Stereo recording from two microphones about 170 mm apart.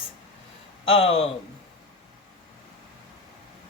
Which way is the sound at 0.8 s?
30° left (ahead or behind).